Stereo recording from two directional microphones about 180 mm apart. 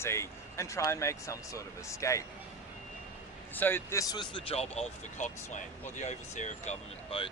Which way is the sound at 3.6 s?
10° left (ahead or behind).